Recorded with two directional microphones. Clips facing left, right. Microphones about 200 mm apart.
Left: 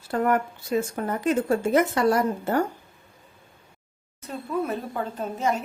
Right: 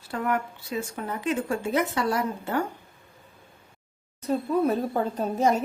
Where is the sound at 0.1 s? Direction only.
50° left (ahead or behind).